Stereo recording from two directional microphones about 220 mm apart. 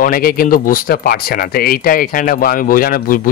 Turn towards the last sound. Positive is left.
turn(degrees=40)  # may be behind; listen again after turning